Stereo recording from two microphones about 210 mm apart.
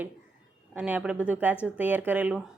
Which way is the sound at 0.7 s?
10° right (ahead or behind).